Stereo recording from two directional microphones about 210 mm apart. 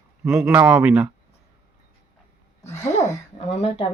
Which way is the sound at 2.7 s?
10° left (ahead or behind).